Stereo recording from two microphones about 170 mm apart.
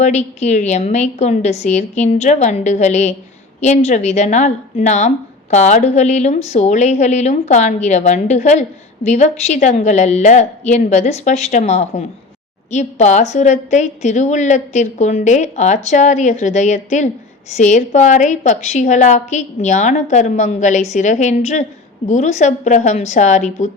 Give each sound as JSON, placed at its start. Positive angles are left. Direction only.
{"t": 0.0, "sound": "a woman's voice", "side_deg": 40}